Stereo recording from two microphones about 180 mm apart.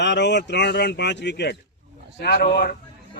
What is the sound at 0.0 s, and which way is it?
A man's voice, 70° left (ahead or behind).